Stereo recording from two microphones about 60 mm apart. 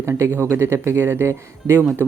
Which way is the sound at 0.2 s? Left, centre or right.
Right.